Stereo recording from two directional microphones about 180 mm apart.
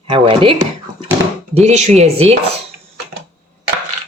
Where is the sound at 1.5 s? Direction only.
40° right (ahead or behind).